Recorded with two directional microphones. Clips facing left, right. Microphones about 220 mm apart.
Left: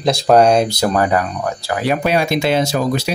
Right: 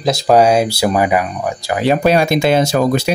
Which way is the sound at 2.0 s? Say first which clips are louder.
Right 4 dB; 45° right (ahead or behind).